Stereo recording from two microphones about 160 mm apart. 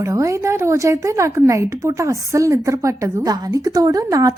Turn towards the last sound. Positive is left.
turn(degrees=-20)  # may be behind; listen again after turning